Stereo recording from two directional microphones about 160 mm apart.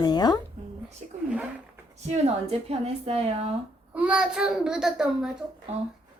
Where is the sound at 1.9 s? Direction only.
40° right (ahead or behind).